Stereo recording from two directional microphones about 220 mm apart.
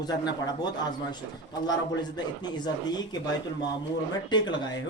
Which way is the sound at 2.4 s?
20° left (ahead or behind).